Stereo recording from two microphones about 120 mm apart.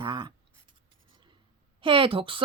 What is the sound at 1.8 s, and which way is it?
Speech, 45° right (ahead or behind).